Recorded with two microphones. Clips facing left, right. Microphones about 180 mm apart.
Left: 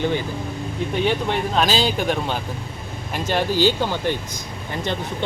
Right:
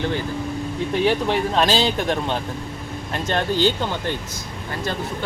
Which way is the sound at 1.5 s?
Centre (ahead or behind).